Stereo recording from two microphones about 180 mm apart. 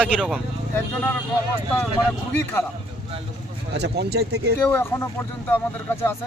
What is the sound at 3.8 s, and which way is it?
Speech, 65° right (ahead or behind).